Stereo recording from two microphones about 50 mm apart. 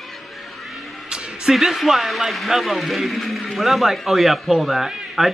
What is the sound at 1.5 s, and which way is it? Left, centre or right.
A man's voice, centre.